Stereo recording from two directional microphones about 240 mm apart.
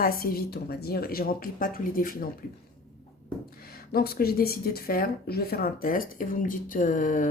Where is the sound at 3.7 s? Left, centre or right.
Left.